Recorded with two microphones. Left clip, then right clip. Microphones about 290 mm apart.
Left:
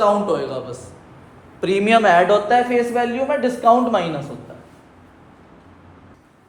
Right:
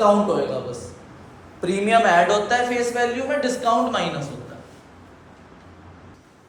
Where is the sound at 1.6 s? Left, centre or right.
Left.